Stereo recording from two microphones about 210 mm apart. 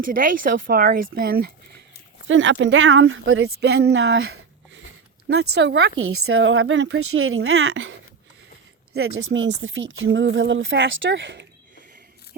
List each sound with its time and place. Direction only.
0.0 s speech: 40° right (ahead or behind)
2.2 s speech: 65° right (ahead or behind)
3.4 s speech: 50° right (ahead or behind)
4.0 s a sound: 70° right (ahead or behind)
5.5 s speech: 50° right (ahead or behind)
6.0 s speech: 75° right (ahead or behind); by 7.9 s 60° right (ahead or behind)
8.9 s speech: 80° right; by 11.4 s 60° right (ahead or behind)